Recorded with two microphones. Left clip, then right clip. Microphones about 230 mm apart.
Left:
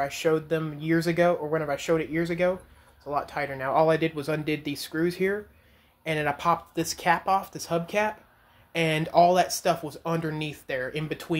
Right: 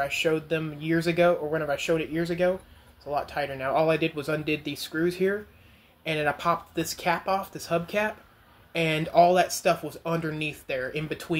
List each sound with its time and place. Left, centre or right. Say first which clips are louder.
0.0 s speech: even; left